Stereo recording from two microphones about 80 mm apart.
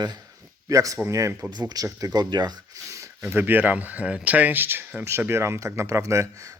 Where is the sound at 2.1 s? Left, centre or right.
Right.